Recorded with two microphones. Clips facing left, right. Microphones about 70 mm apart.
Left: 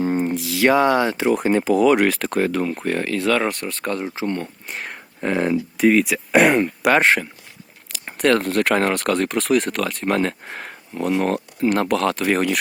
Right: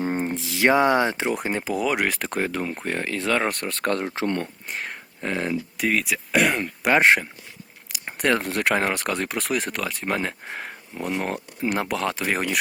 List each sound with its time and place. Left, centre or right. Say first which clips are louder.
0.0 s a sound: left 5 dB; right
1.3 s speech: left 8 dB; centre
2.0 s speech: left 6 dB; centre
3.5 s speech: even; right
5.2 s speech: left 6 dB; left
6.3 s speech: left 7 dB; left
7.9 s speech: left 5 dB; centre